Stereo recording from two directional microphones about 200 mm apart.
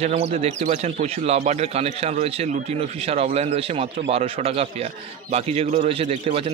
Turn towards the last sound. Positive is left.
turn(degrees=-30)  # may be behind; listen again after turning